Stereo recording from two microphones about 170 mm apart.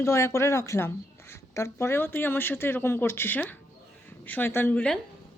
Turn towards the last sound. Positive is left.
turn(degrees=10)  # may be behind; listen again after turning